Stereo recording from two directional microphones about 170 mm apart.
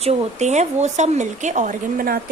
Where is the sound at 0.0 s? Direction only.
40° right (ahead or behind).